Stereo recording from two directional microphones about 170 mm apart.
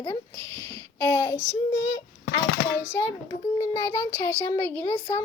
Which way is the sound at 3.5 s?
15° left (ahead or behind).